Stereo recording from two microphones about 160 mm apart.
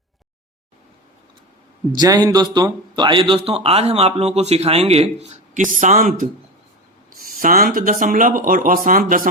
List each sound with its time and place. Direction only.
2.0 s a man's voice: 25° right (ahead or behind); by 5.6 s 45° right (ahead or behind)
5.7 s speech: 55° right (ahead or behind)